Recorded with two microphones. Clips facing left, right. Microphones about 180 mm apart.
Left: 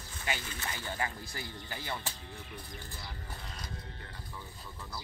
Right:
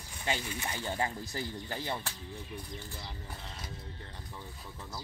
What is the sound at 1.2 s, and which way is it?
Speech, 35° right (ahead or behind).